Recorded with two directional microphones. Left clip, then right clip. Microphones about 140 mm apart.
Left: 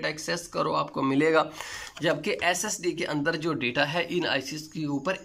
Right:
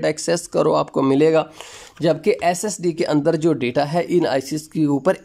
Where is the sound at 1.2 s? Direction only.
25° right (ahead or behind).